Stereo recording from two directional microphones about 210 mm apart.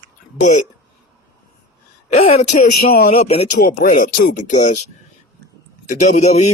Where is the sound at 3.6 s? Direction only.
40° left (ahead or behind).